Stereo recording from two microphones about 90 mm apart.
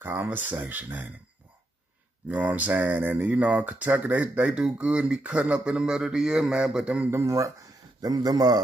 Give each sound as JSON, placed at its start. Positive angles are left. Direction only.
{"t": 0.0, "sound": "speech", "side_deg": -25}
{"t": 2.2, "sound": "speech", "side_deg": -15}
{"t": 7.1, "sound": "speech", "side_deg": -30}